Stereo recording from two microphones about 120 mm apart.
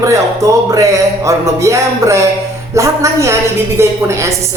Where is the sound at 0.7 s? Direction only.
25° right (ahead or behind).